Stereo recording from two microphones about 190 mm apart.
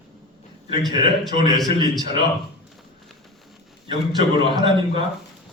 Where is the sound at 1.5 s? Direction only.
20° right (ahead or behind).